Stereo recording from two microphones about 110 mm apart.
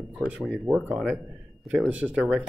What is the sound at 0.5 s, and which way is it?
Speech, centre (ahead or behind).